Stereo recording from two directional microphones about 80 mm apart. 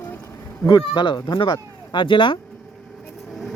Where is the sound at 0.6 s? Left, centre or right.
Left.